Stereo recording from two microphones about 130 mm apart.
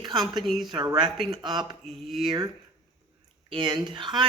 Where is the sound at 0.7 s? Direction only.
35° right (ahead or behind).